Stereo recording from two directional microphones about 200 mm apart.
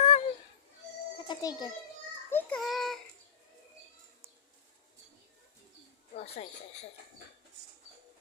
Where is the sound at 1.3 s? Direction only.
20° left (ahead or behind).